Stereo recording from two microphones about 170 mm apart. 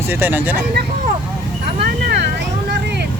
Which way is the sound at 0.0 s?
10° right (ahead or behind).